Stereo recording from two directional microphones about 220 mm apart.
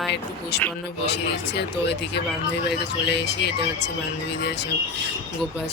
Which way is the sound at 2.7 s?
50° left (ahead or behind).